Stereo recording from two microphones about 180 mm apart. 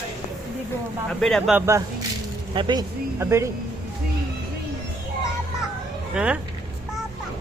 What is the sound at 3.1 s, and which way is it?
Speech, 15° right (ahead or behind).